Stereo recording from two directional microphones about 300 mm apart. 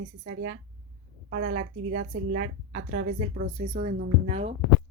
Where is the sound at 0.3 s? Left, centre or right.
Right.